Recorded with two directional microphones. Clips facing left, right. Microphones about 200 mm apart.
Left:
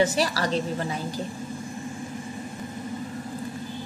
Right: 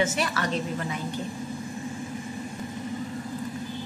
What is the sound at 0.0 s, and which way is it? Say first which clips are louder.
Speech: left 3 dB; 35° left (ahead or behind).